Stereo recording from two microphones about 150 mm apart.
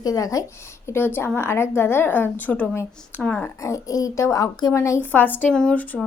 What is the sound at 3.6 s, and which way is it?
Speech, 20° left (ahead or behind).